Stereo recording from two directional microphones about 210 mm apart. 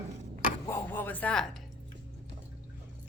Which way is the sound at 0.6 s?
10° left (ahead or behind).